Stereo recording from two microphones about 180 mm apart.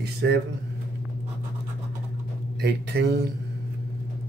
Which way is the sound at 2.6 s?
65° right (ahead or behind).